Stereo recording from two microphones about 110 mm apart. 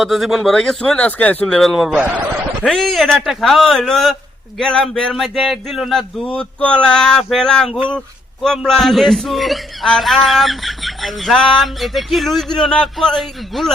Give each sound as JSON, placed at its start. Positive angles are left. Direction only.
{"t": 0.0, "sound": "a man's voice", "side_deg": 0}
{"t": 1.9, "sound": "fowl", "side_deg": -15}
{"t": 2.6, "sound": "a man's voice", "side_deg": 0}